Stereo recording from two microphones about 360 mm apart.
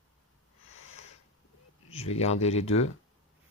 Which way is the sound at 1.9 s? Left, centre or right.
Centre.